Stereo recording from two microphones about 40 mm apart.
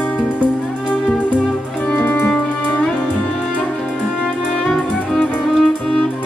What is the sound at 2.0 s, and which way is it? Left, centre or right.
Music, left.